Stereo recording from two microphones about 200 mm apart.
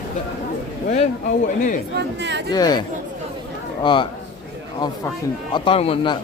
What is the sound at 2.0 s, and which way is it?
Speech, 60° right (ahead or behind).